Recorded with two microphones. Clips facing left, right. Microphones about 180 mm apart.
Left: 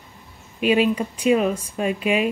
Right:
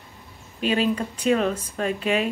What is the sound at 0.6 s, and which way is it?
Speech, 10° left (ahead or behind).